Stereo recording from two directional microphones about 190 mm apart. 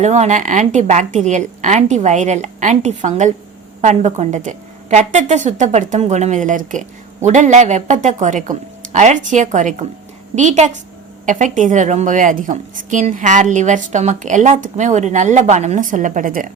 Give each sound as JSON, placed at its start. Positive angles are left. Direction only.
{"t": 0.0, "sound": "a woman's voice", "side_deg": -35}